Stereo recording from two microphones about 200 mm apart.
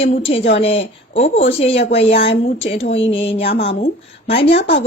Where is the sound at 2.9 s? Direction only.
65° left (ahead or behind).